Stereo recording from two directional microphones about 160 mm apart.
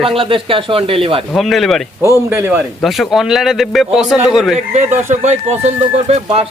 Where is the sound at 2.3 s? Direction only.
15° right (ahead or behind).